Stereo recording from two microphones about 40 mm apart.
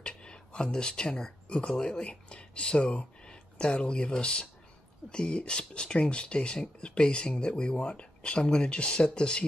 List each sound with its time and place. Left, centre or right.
0.0 s speech: left